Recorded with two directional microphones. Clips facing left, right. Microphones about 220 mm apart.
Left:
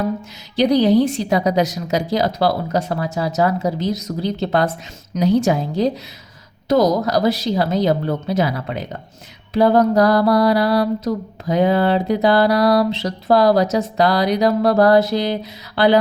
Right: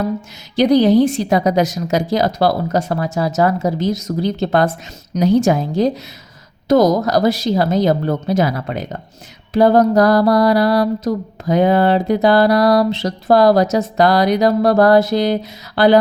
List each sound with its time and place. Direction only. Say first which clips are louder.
0.5 s mantra: right 3 dB; 50° right (ahead or behind)
5.1 s a woman's voice: right 2 dB; 40° right (ahead or behind)
5.5 s mantra: right 3 dB; 50° right (ahead or behind)